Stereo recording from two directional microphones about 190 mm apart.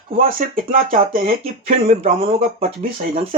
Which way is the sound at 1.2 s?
30° right (ahead or behind).